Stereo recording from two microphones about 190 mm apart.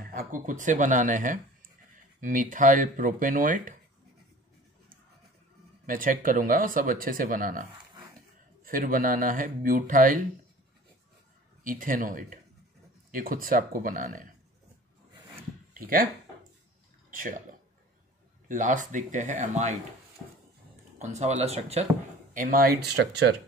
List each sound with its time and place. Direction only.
0.1 s speech: 45° right (ahead or behind)
5.9 s speech: 45° right (ahead or behind)
8.6 s speech: 45° right (ahead or behind)
11.6 s speech: 45° right (ahead or behind)
15.7 s speech: 50° right (ahead or behind)
17.1 s speech: 45° right (ahead or behind)
21.0 s speech: 35° right (ahead or behind)
22.3 s speech: 45° right (ahead or behind)